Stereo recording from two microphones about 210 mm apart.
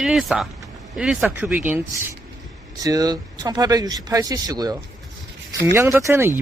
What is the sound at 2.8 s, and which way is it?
Speech, 15° right (ahead or behind).